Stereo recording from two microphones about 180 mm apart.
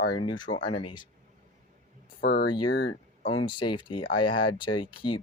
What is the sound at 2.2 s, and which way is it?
Speech, 60° left (ahead or behind).